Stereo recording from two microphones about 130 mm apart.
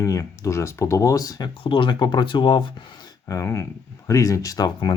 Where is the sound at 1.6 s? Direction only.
40° left (ahead or behind).